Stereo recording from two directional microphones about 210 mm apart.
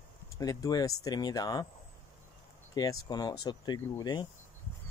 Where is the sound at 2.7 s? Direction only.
20° left (ahead or behind).